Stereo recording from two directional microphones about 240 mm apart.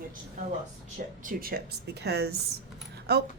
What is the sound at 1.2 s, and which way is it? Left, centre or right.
Speech, right.